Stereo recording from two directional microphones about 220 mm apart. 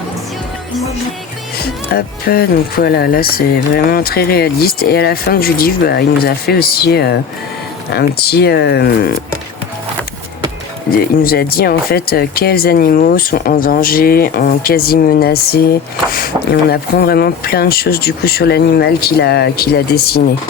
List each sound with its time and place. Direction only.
1.5 s speech: 45° left (ahead or behind)
11.0 s speech: 40° left (ahead or behind)